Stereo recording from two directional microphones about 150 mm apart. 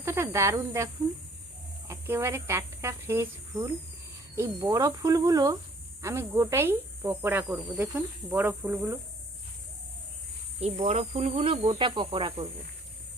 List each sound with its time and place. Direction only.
0.0 s speech: 15° right (ahead or behind)
1.9 s cricket: 15° right (ahead or behind)
4.4 s speech: 20° right (ahead or behind)
6.0 s cricket: 20° right (ahead or behind)
10.6 s speech: 45° right (ahead or behind)